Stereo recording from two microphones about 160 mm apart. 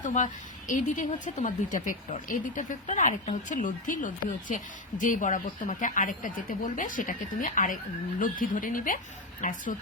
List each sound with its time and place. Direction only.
0.0 s a woman's voice: 50° left (ahead or behind)